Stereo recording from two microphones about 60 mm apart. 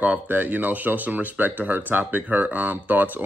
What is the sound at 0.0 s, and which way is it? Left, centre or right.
Speech, right.